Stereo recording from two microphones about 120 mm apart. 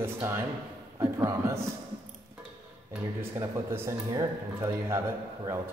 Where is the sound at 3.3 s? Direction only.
25° right (ahead or behind).